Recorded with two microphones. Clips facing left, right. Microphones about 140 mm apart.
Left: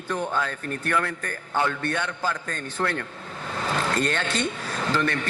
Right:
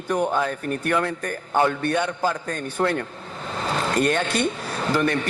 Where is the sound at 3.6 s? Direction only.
15° right (ahead or behind).